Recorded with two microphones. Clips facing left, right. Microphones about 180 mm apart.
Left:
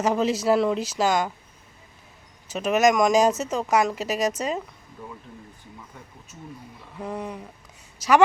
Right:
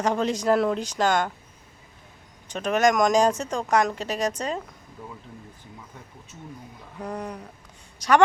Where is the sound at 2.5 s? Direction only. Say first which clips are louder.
Left 2 dB; 5° left (ahead or behind).